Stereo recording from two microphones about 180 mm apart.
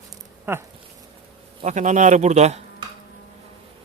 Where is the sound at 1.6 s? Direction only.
40° right (ahead or behind).